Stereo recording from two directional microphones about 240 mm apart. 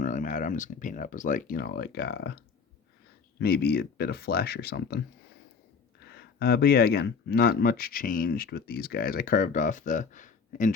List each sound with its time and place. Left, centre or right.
0.0 s speech: left
6.1 s speech: left